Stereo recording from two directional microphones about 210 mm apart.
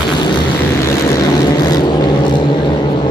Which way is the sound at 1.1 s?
20° left (ahead or behind).